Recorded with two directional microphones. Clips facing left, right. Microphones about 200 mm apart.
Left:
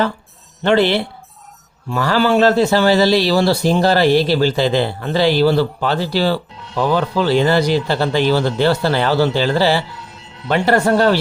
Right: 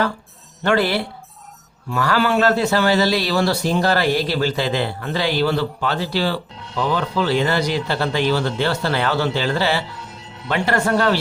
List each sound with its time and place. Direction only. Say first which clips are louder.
0.6 s a man's voice: left 4 dB; 25° left (ahead or behind)